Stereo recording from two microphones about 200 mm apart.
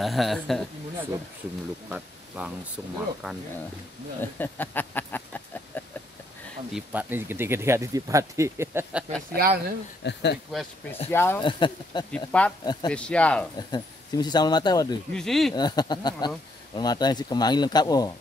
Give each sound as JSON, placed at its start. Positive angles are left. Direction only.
{"t": 0.0, "sound": "speech", "side_deg": 0}
{"t": 1.9, "sound": "speech", "side_deg": -5}
{"t": 4.2, "sound": "a sound", "side_deg": 10}
{"t": 6.7, "sound": "speech", "side_deg": -10}
{"t": 9.3, "sound": "speech", "side_deg": -50}
{"t": 10.0, "sound": "speech", "side_deg": 60}
{"t": 10.5, "sound": "speech", "side_deg": 0}
{"t": 11.1, "sound": "speech", "side_deg": 10}
{"t": 11.4, "sound": "speech", "side_deg": 20}
{"t": 12.3, "sound": "speech", "side_deg": 5}
{"t": 13.6, "sound": "speech", "side_deg": 20}
{"t": 15.1, "sound": "speech", "side_deg": 0}
{"t": 15.5, "sound": "speech", "side_deg": 20}